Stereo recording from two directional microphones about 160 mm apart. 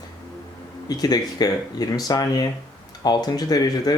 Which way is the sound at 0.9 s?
25° left (ahead or behind).